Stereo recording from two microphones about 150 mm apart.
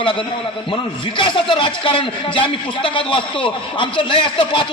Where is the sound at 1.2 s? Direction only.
35° left (ahead or behind).